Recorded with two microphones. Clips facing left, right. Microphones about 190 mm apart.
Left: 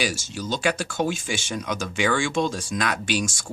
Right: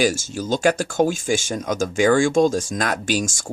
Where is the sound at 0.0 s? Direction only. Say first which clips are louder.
Right 7 dB; 50° right (ahead or behind).